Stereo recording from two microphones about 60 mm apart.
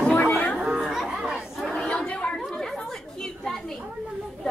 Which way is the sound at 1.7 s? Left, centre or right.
Centre.